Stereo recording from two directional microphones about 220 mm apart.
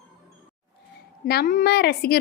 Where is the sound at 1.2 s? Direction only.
45° left (ahead or behind).